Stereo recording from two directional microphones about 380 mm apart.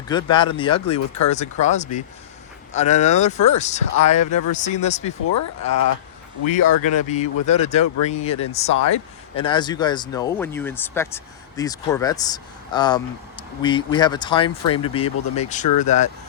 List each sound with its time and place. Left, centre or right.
0.1 s speech: centre
6.5 s speech: centre